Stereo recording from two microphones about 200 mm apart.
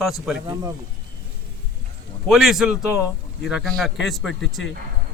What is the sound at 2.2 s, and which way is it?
A man's voice, centre (ahead or behind).